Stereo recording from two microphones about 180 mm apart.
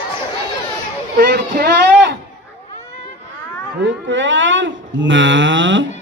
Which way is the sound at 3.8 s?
90° right.